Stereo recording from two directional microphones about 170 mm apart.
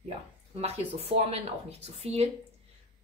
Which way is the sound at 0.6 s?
35° right (ahead or behind).